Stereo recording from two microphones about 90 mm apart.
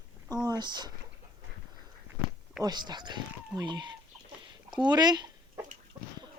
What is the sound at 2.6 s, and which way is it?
Speech, 55° right (ahead or behind).